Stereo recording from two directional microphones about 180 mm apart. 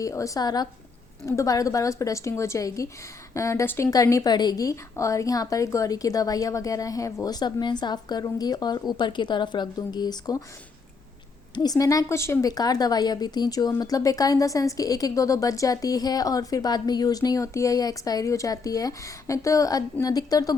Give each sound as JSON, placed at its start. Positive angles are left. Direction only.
{"t": 0.0, "sound": "a woman's voice", "side_deg": 15}
{"t": 11.5, "sound": "a woman's voice", "side_deg": 20}